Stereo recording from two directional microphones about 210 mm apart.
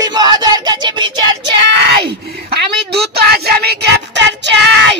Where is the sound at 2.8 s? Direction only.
50° right (ahead or behind).